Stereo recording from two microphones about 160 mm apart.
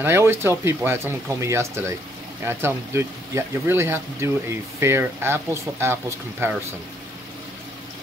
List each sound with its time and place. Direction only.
0.0 s speech: 15° right (ahead or behind)